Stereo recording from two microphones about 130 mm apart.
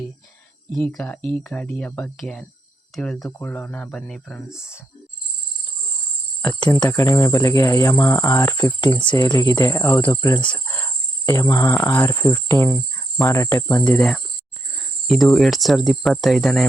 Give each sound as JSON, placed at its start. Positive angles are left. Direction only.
{"t": 0.9, "sound": "speech", "side_deg": 10}
{"t": 3.2, "sound": "speech", "side_deg": 20}
{"t": 4.4, "sound": "speech", "side_deg": -5}
{"t": 6.4, "sound": "speech", "side_deg": 30}
{"t": 10.7, "sound": "cricket", "side_deg": 25}
{"t": 13.2, "sound": "speech", "side_deg": 20}
{"t": 13.8, "sound": "speech", "side_deg": 10}